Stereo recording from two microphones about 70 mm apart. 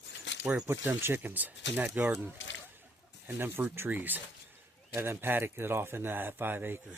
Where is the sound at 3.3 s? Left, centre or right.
Right.